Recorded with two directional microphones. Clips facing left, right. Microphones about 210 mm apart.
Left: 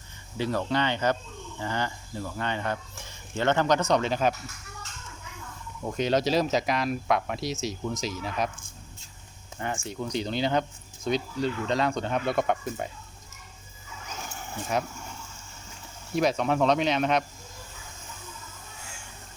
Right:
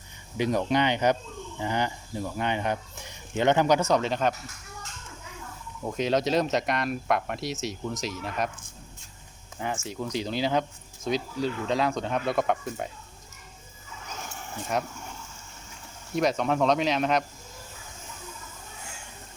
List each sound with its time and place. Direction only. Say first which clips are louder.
0.3 s speech: right 3 dB; 15° right (ahead or behind); by 4.4 s 5° left (ahead or behind)
5.8 s speech: even; centre (ahead or behind)
9.6 s speech: even; 5° right (ahead or behind)
14.6 s speech: even; centre (ahead or behind)
16.1 s speech: even; centre (ahead or behind)